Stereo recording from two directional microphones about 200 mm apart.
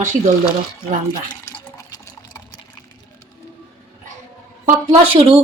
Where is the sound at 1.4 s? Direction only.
15° left (ahead or behind).